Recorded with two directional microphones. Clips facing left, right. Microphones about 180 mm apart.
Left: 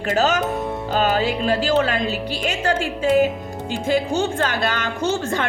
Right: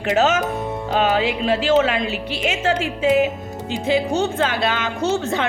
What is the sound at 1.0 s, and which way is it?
A woman's voice, 40° left (ahead or behind).